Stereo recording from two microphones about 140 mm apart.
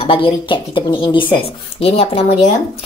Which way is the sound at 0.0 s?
40° left (ahead or behind).